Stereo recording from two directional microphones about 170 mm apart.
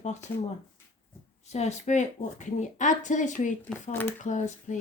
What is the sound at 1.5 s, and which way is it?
Speech, 40° left (ahead or behind).